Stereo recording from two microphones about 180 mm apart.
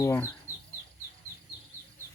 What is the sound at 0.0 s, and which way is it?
Speech, 15° left (ahead or behind).